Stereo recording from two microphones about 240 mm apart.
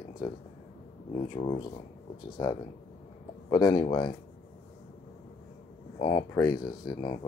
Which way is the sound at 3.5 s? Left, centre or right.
Centre.